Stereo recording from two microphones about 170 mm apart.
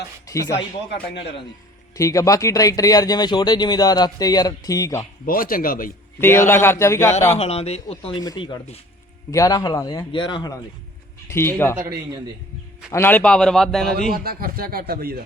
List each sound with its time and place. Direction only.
0.3 s speech: 20° left (ahead or behind)
2.0 s speech: 20° left (ahead or behind)
5.2 s speech: 55° left (ahead or behind)
6.1 s speech: 15° left (ahead or behind)
7.3 s speech: 35° left (ahead or behind)
8.2 s speech: 25° left (ahead or behind)
11.3 s speech: 15° left (ahead or behind)
12.9 s a man's voice: 10° left (ahead or behind)
14.1 s speech: 60° right (ahead or behind)